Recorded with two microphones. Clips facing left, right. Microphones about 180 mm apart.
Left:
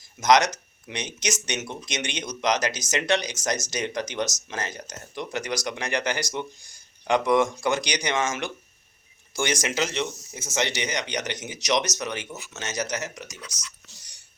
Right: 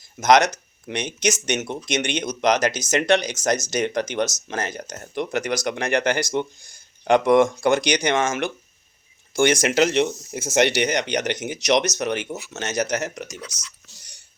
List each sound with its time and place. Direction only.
0.2 s speech: 55° right (ahead or behind)